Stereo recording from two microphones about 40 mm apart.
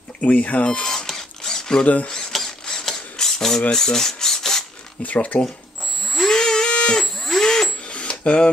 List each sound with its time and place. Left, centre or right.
0.2 s speech: left
0.7 s rodents: centre
2.3 s mechanisms: centre
3.7 s filing: centre
5.0 s speech: left
6.1 s a sound: centre
7.0 s a sound: centre
7.9 s cash register: left